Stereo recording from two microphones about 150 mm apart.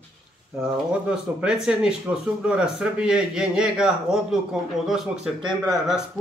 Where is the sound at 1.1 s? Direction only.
5° right (ahead or behind).